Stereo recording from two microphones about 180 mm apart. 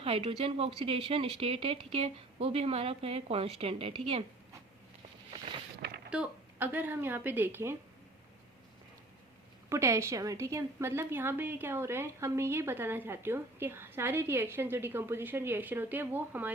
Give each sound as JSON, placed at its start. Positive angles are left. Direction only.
{"t": 0.0, "sound": "speech", "side_deg": -30}
{"t": 6.1, "sound": "a woman's voice", "side_deg": -10}
{"t": 9.6, "sound": "a woman's voice", "side_deg": -15}